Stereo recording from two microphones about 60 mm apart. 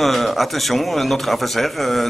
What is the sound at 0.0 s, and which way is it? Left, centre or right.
Speech, centre.